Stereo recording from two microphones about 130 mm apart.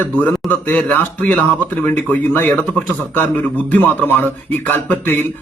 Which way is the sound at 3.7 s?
15° left (ahead or behind).